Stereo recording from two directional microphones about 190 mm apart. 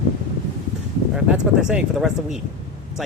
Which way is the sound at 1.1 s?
5° right (ahead or behind).